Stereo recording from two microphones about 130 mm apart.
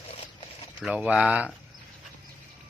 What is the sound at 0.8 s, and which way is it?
Speech, 5° right (ahead or behind).